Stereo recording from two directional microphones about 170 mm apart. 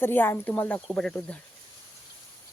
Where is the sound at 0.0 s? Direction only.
10° left (ahead or behind).